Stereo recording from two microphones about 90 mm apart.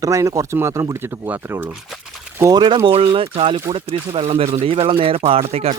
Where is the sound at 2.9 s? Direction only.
90° right.